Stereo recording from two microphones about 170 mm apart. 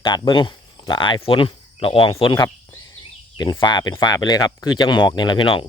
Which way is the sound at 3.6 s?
25° left (ahead or behind).